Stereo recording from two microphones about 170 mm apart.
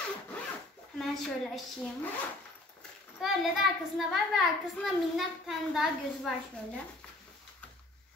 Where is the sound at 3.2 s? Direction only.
Centre (ahead or behind).